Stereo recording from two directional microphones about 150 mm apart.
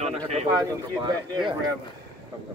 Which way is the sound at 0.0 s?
45° right (ahead or behind).